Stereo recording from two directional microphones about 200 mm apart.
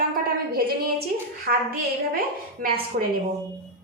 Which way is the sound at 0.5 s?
50° right (ahead or behind).